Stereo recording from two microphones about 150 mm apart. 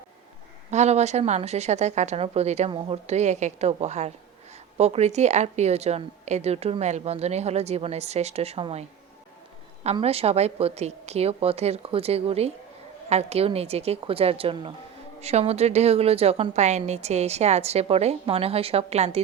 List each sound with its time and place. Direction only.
0.7 s a woman's voice: 50° right (ahead or behind)
9.8 s a woman's voice: 45° right (ahead or behind)